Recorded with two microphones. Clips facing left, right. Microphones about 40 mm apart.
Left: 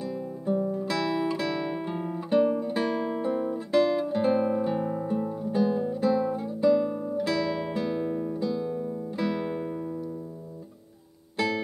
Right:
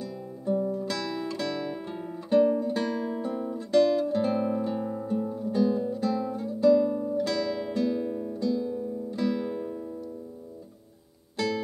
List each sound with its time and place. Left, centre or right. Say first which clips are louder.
0.0 s guitar: left 3 dB; centre
11.3 s music: left 1 dB; centre